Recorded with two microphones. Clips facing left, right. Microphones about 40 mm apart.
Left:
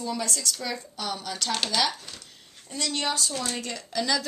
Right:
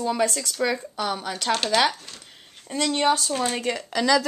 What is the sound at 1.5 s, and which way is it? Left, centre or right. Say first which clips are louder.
Speech: right 6 dB; centre.